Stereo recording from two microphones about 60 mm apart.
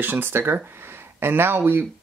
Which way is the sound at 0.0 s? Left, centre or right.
Right.